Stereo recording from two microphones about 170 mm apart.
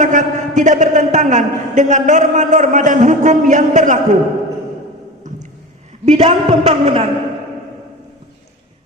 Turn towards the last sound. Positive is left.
turn(degrees=-35)  # may be behind; listen again after turning